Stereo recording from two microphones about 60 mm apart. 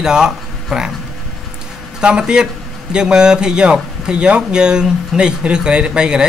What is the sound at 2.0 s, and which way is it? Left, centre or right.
Mantra, centre.